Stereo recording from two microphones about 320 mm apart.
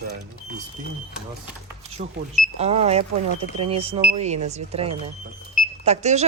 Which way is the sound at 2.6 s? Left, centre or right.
Centre.